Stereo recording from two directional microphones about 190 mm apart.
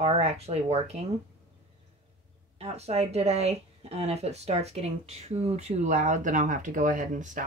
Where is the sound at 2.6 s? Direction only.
35° right (ahead or behind).